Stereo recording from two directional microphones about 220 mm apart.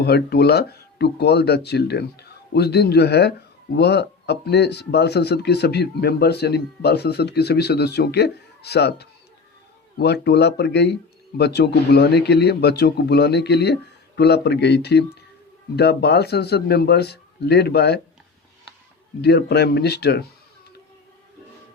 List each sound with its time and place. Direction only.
0.0 s speech: 45° left (ahead or behind)
19.2 s speech: 50° left (ahead or behind)